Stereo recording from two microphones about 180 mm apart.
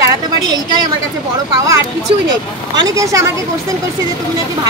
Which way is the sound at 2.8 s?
20° right (ahead or behind).